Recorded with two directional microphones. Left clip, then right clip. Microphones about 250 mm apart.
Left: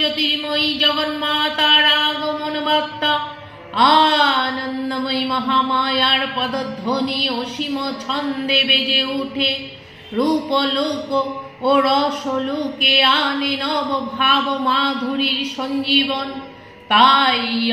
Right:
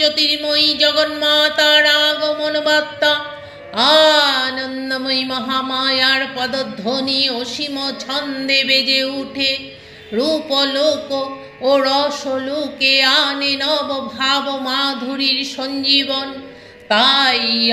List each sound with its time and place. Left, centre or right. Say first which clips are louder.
0.0 s mantra: right 3 dB; right